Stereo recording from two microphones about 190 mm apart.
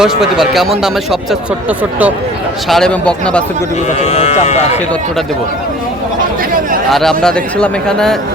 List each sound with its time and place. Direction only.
0.0 s a man's voice: centre (ahead or behind)
2.6 s a man's voice: centre (ahead or behind)
4.0 s speech: 35° left (ahead or behind)
6.9 s a man's voice: centre (ahead or behind)